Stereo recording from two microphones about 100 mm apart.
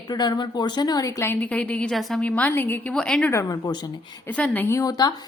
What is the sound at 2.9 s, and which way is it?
Speech, 5° left (ahead or behind).